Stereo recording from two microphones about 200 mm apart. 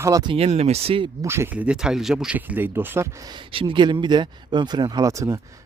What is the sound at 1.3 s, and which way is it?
Speech, 10° right (ahead or behind).